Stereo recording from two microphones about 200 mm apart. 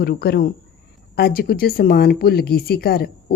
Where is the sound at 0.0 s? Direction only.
50° left (ahead or behind).